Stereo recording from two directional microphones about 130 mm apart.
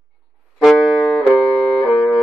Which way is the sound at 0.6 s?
5° right (ahead or behind).